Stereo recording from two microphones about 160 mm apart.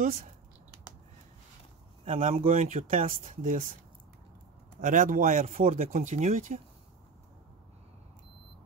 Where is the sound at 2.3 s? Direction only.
55° right (ahead or behind).